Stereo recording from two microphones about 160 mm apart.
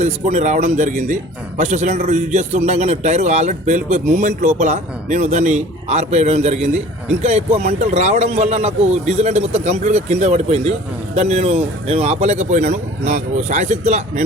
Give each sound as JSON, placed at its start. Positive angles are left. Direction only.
{"t": 0.0, "sound": "speech", "side_deg": -50}